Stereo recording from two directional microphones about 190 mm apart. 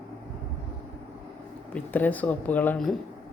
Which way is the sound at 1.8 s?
10° left (ahead or behind).